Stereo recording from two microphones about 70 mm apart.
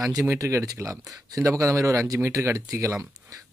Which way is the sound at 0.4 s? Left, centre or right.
Right.